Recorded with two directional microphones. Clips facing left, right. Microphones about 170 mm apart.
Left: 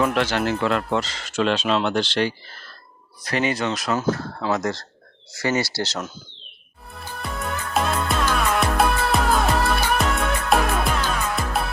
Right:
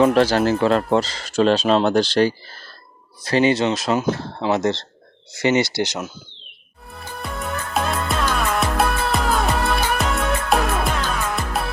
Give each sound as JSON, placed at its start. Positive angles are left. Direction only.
{"t": 0.0, "sound": "speech", "side_deg": -35}
{"t": 7.2, "sound": "music", "side_deg": 0}